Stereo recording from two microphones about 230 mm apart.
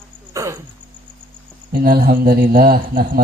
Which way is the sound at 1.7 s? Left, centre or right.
Right.